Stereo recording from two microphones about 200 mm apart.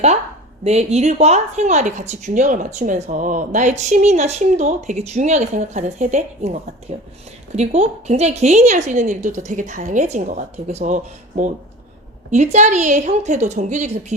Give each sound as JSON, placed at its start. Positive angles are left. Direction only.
{"t": 0.6, "sound": "a woman's voice", "side_deg": -30}